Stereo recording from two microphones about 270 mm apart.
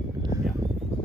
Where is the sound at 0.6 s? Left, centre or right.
Centre.